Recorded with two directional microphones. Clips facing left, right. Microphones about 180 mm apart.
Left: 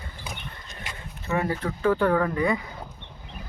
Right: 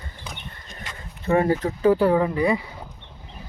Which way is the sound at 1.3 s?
35° right (ahead or behind).